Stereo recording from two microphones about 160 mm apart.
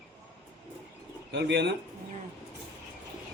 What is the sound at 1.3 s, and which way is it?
Speech, 90° right.